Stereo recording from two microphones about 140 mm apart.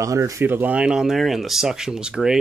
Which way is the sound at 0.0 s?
20° right (ahead or behind).